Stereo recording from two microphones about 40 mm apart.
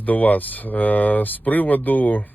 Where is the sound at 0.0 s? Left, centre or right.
Left.